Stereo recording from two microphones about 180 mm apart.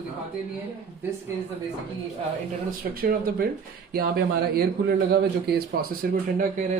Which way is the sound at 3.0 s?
55° right (ahead or behind).